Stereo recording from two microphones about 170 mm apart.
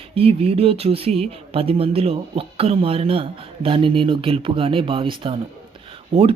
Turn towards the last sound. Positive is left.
turn(degrees=-35)  # may be behind; listen again after turning